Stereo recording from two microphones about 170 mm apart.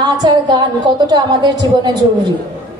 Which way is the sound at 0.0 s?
25° right (ahead or behind).